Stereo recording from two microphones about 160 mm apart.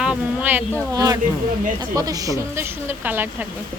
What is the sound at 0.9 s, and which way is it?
A woman's voice, 20° right (ahead or behind).